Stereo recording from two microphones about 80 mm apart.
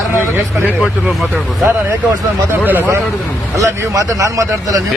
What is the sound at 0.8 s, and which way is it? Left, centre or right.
Speech, centre.